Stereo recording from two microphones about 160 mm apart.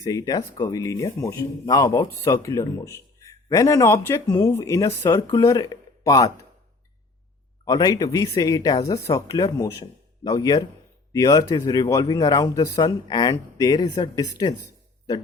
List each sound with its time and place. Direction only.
0.0 s speech: 20° left (ahead or behind)
7.6 s speech: 25° left (ahead or behind)